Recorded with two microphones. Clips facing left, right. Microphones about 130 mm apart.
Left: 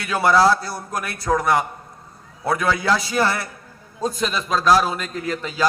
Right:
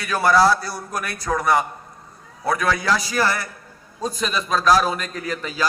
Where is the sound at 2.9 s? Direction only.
25° left (ahead or behind).